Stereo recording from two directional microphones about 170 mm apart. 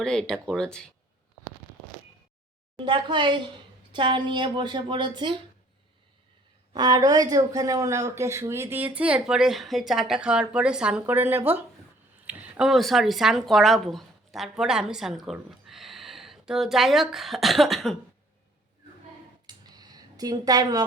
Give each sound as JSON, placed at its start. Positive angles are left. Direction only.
{"t": 0.0, "sound": "speech", "side_deg": 5}
{"t": 2.7, "sound": "a woman's voice", "side_deg": -30}
{"t": 6.7, "sound": "speech", "side_deg": -25}
{"t": 19.5, "sound": "a sound", "side_deg": -25}